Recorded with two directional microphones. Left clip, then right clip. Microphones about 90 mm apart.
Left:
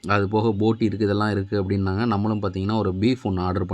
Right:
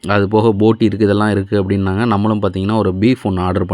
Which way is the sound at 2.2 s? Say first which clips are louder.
Right 9 dB; 45° right (ahead or behind).